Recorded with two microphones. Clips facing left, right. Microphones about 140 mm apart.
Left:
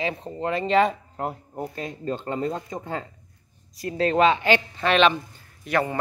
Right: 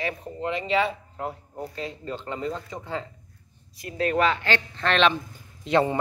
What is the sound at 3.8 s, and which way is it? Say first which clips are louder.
A woman's voice: left 4 dB; 35° left (ahead or behind).